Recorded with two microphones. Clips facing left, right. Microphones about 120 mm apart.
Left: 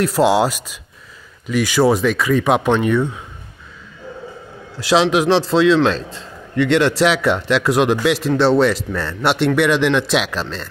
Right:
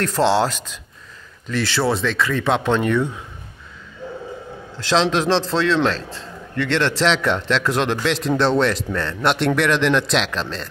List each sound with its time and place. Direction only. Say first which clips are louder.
0.0 s a man's voice: left 3 dB; 10° left (ahead or behind)
4.7 s a man's voice: left 4 dB; 10° left (ahead or behind)